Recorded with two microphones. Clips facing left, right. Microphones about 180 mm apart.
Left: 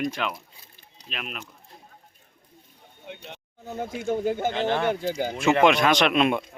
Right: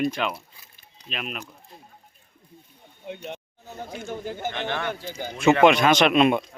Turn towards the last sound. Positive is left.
turn(degrees=0)  # may be behind; listen again after turning